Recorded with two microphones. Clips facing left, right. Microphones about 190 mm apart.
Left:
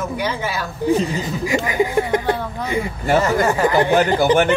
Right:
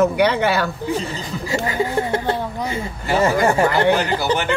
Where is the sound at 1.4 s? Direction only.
15° left (ahead or behind).